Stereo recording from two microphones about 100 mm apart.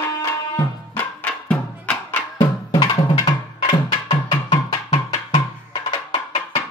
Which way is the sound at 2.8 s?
45° left (ahead or behind).